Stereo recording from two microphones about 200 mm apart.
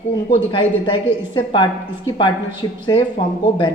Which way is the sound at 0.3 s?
25° left (ahead or behind).